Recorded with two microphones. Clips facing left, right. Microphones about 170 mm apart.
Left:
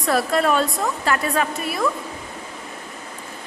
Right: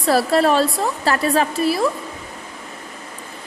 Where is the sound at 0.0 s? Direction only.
35° right (ahead or behind).